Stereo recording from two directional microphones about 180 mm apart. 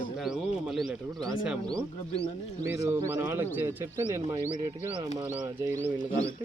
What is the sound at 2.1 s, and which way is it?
Speech, 35° left (ahead or behind).